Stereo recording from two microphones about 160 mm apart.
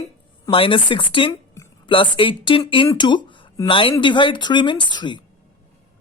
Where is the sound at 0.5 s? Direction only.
35° left (ahead or behind).